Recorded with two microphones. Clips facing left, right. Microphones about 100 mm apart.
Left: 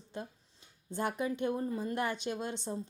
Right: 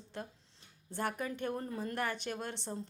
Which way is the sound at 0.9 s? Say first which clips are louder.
Left 3 dB; 20° left (ahead or behind).